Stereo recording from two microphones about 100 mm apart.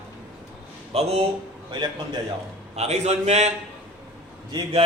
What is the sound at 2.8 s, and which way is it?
Speech, 90° right.